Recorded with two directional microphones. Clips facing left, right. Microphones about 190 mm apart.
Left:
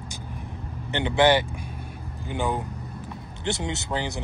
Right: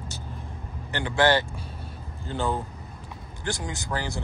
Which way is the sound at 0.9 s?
20° left (ahead or behind).